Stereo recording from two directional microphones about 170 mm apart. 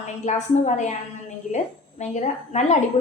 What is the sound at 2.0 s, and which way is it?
Speech, 40° left (ahead or behind).